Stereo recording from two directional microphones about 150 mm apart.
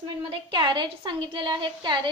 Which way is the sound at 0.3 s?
30° right (ahead or behind).